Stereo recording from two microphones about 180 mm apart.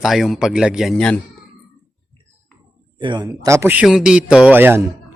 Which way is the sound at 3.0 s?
25° right (ahead or behind).